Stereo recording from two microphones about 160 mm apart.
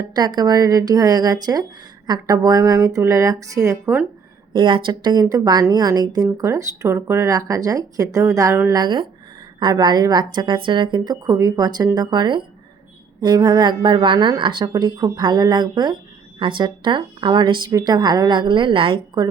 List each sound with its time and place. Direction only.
0.1 s a woman's voice: 25° right (ahead or behind)
4.5 s a woman's voice: 30° right (ahead or behind)
8.8 s a woman's voice: 30° right (ahead or behind)